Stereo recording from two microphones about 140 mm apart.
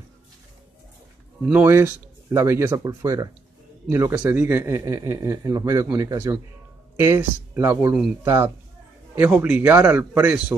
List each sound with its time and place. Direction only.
1.4 s a man's voice: 15° right (ahead or behind)